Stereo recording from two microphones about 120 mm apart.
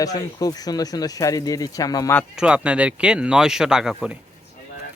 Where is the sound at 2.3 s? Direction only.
5° right (ahead or behind).